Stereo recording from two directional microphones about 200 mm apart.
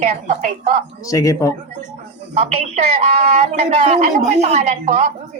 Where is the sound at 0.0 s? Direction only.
30° right (ahead or behind).